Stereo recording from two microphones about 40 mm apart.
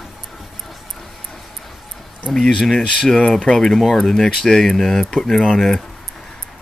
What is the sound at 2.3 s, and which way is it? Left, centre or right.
Speech, centre.